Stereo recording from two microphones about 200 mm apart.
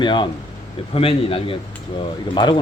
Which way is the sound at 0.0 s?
25° left (ahead or behind).